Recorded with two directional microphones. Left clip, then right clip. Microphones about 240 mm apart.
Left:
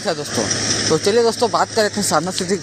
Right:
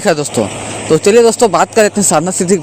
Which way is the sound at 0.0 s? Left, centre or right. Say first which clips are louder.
Right 8 dB; right.